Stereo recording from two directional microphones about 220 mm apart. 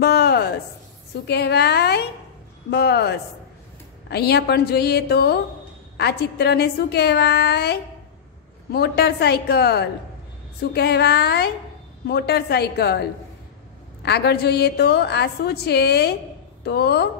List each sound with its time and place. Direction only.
0.0 s a sound: 45° left (ahead or behind)
1.2 s a woman's voice: 50° left (ahead or behind)
14.0 s a woman's voice: 50° left (ahead or behind)